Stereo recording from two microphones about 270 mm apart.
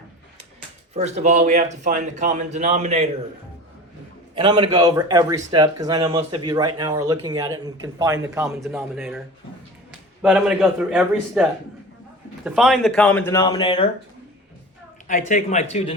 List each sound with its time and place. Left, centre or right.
0.9 s speech: right
4.4 s a man's voice: centre
10.2 s speech: centre
12.5 s speech: centre
15.0 s speech: left